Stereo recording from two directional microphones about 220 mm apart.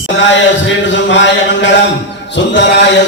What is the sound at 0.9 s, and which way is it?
Mantra, 55° left (ahead or behind).